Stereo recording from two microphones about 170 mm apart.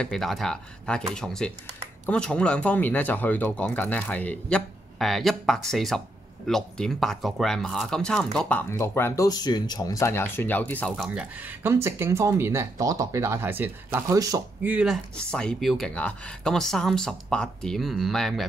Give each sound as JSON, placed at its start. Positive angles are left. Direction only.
{"t": 0.0, "sound": "speech", "side_deg": 0}
{"t": 11.3, "sound": "speech", "side_deg": -10}
{"t": 14.7, "sound": "speech", "side_deg": -5}
{"t": 15.1, "sound": "speech", "side_deg": 5}